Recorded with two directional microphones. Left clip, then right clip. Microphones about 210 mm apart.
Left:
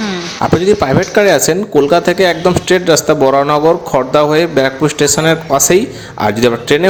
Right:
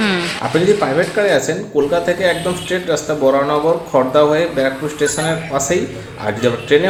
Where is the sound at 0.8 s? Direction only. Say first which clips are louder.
Left 5 dB; 55° left (ahead or behind).